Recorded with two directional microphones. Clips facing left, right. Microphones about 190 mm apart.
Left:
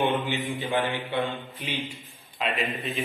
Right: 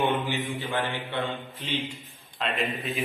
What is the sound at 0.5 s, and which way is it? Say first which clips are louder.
Mantra: left 3 dB; 15° left (ahead or behind).